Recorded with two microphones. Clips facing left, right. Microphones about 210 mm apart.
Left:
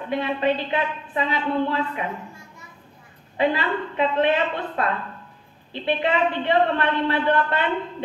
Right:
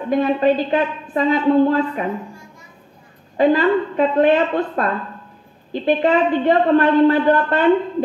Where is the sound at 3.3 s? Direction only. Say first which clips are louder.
Right 8 dB; 40° right (ahead or behind).